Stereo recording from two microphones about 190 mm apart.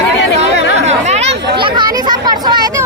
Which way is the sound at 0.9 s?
35° right (ahead or behind).